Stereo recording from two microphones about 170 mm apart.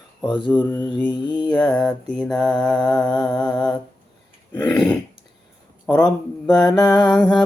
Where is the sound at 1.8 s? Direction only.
5° left (ahead or behind).